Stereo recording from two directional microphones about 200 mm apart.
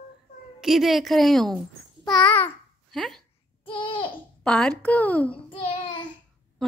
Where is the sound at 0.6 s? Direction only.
Centre (ahead or behind).